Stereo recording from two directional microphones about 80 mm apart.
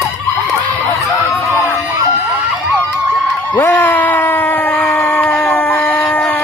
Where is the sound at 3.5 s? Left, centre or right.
Left.